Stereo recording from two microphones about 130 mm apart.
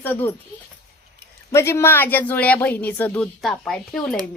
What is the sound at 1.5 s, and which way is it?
A woman's voice, 20° left (ahead or behind).